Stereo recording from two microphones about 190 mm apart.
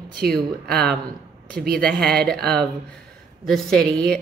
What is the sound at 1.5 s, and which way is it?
Speech, 55° right (ahead or behind).